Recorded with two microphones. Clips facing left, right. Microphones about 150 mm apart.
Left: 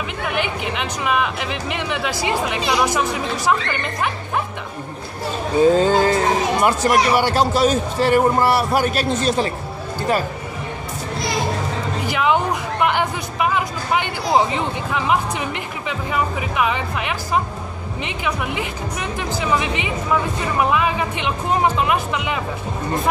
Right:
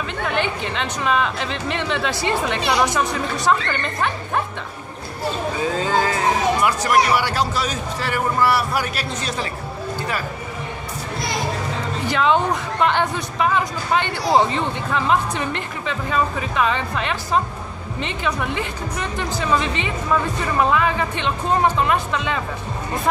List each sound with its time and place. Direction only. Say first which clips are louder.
0.2 s speech: right 1 dB; 10° left (ahead or behind)
5.8 s a man's voice: left 5 dB; 30° left (ahead or behind)
12.1 s speech: right 1 dB; 10° left (ahead or behind)